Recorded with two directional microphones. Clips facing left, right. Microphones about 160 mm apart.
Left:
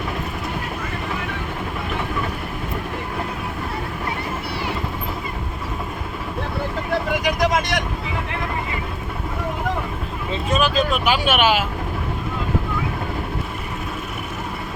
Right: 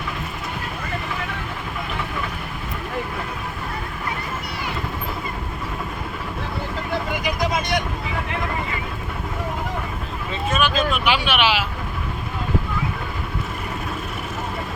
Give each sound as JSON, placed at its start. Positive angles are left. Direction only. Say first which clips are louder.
{"t": 7.1, "sound": "vehicle", "louder": "left 5 dB", "side_deg": 80}
{"t": 10.5, "sound": "speech", "louder": "left 2 dB", "side_deg": 35}